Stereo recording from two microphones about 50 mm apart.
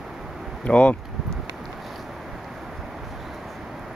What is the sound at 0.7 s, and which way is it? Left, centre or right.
Speech, left.